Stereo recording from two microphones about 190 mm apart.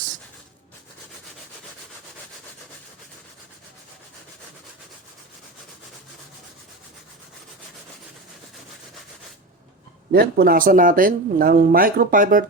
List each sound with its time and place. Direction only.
10.1 s speech: 55° right (ahead or behind)